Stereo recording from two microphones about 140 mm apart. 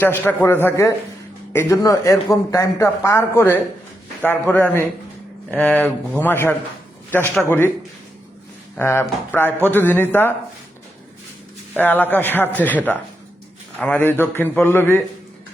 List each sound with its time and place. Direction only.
0.0 s a man's voice: 15° left (ahead or behind)
8.8 s a man's voice: 15° left (ahead or behind)
11.7 s a man's voice: 15° left (ahead or behind)